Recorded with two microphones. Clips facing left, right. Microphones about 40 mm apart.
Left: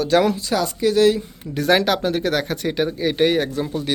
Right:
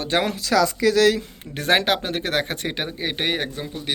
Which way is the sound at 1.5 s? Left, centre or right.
Right.